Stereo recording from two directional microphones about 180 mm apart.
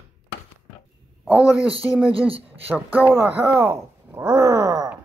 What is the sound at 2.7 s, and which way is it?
Speech, 10° right (ahead or behind).